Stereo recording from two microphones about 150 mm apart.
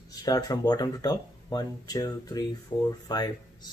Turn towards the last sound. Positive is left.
turn(degrees=25)  # may be behind; listen again after turning